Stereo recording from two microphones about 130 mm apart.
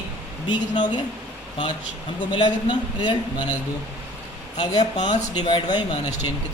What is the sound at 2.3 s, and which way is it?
Speech, 40° left (ahead or behind).